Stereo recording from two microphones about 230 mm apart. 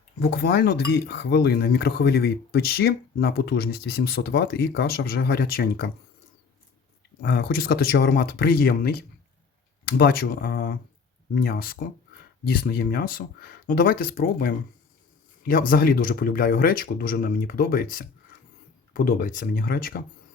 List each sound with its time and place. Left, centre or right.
0.2 s speech: left
7.2 s speech: left